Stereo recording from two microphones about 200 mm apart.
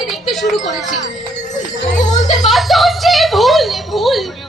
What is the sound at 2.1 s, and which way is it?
Music, 35° left (ahead or behind).